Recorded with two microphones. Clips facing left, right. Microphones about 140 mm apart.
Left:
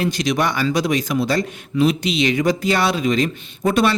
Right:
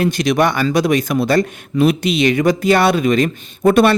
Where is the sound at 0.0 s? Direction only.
55° right (ahead or behind).